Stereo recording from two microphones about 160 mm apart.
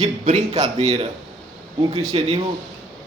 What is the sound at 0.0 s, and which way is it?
Speech, 50° right (ahead or behind).